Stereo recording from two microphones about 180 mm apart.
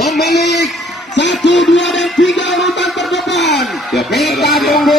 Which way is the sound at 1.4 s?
90° left.